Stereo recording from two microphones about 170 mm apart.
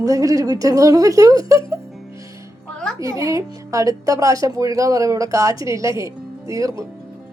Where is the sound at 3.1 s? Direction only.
20° right (ahead or behind).